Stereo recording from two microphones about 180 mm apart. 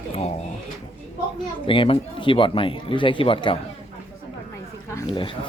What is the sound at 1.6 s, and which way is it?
Speech, 30° left (ahead or behind).